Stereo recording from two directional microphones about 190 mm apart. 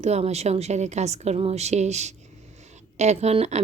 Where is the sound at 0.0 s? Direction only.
35° right (ahead or behind).